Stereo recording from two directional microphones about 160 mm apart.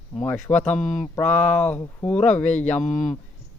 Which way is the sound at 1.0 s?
10° left (ahead or behind).